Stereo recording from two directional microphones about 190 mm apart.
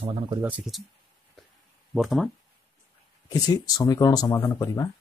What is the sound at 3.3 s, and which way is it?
Speech, 20° left (ahead or behind).